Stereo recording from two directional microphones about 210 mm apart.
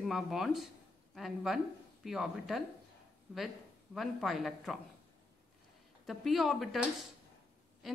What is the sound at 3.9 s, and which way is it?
Speech, centre (ahead or behind).